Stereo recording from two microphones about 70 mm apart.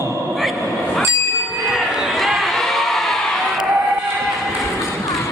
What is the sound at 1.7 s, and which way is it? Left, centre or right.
Basketball bounce, centre.